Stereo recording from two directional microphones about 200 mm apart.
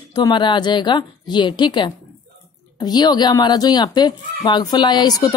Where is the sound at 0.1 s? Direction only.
20° left (ahead or behind).